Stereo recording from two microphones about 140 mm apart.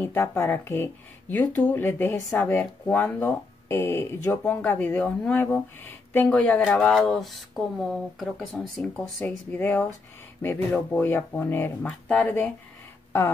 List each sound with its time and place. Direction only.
0.0 s speech: 15° left (ahead or behind)